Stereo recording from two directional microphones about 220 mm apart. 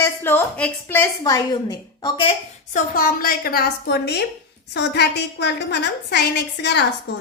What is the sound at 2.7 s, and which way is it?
A woman's voice, 40° left (ahead or behind).